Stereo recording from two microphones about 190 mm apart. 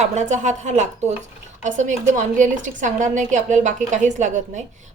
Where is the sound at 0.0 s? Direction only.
40° right (ahead or behind).